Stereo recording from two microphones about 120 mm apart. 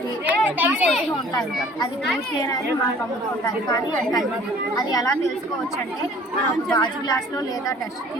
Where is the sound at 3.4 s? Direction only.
30° left (ahead or behind).